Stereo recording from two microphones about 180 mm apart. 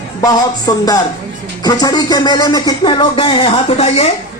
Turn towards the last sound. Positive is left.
turn(degrees=35)  # may be behind; listen again after turning